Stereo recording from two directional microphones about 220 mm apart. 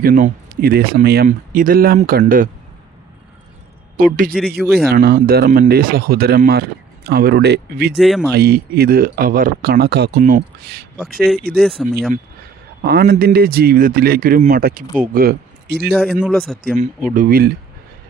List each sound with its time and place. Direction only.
0.0 s speech: 40° right (ahead or behind)
3.9 s speech: 40° right (ahead or behind)
4.5 s speech: centre (ahead or behind)
4.9 s speech: 45° right (ahead or behind)
7.9 s speech: centre (ahead or behind)
8.3 s speech: 45° right (ahead or behind)
11.6 s speech: centre (ahead or behind)
12.8 s speech: 45° right (ahead or behind)
15.9 s speech: centre (ahead or behind)
17.2 s speech: 40° right (ahead or behind)